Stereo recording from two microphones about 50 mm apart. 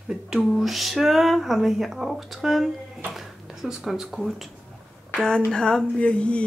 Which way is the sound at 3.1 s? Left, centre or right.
Centre.